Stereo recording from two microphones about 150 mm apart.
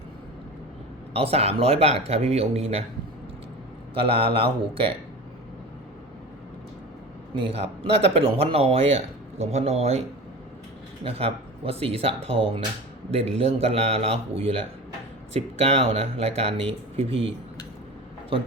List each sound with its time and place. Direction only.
1.1 s speech: 40° right (ahead or behind)
3.9 s speech: 40° right (ahead or behind)
7.3 s speech: 40° right (ahead or behind)
11.0 s speech: 40° right (ahead or behind)